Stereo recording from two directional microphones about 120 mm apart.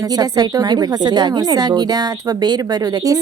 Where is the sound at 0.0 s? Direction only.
35° right (ahead or behind).